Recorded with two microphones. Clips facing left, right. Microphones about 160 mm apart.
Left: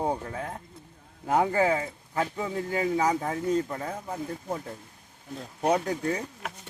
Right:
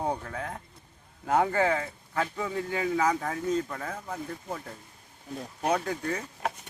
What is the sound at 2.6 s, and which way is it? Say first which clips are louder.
Speech: left 2 dB; 40° left (ahead or behind).